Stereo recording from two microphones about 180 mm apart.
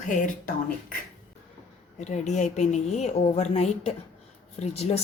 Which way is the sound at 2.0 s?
40° left (ahead or behind).